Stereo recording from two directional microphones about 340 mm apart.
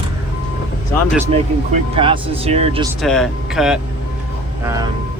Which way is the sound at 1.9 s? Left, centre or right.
Centre.